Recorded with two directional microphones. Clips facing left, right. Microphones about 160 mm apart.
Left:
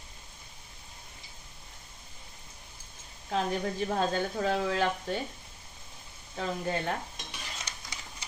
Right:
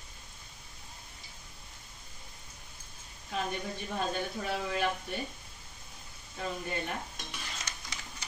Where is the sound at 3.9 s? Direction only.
90° left.